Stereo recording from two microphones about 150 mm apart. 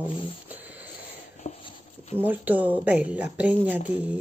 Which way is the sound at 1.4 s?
45° left (ahead or behind).